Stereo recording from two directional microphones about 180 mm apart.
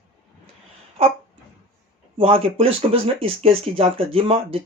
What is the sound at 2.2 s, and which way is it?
Speech, 30° right (ahead or behind).